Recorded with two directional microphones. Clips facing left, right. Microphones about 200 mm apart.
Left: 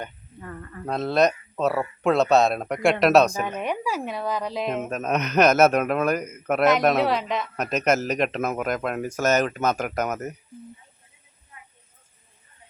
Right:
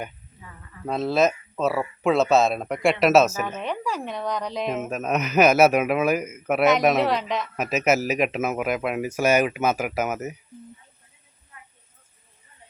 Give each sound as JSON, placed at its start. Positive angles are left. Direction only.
{"t": 0.3, "sound": "speech", "side_deg": 55}
{"t": 0.9, "sound": "speech", "side_deg": 0}
{"t": 3.4, "sound": "speech", "side_deg": 15}